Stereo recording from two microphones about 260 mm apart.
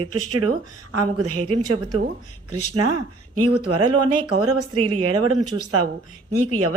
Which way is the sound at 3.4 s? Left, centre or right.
Right.